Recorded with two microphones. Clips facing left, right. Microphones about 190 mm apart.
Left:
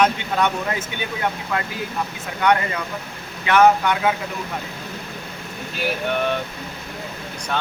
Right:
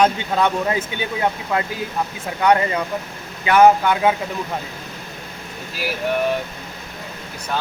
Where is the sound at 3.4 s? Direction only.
30° right (ahead or behind).